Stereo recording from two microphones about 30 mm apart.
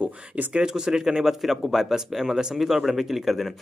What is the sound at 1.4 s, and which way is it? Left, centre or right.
A man's voice, centre.